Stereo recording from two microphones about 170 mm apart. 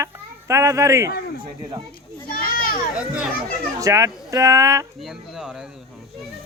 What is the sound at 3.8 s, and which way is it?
Speech, 20° right (ahead or behind).